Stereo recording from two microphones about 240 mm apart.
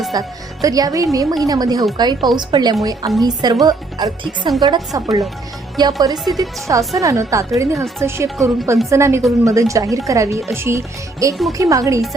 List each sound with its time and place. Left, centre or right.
0.1 s speech: centre